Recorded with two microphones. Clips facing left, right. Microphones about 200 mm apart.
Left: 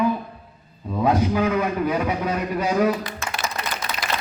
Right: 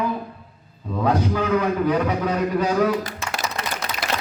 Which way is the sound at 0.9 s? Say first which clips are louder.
Left 1 dB; 10° left (ahead or behind).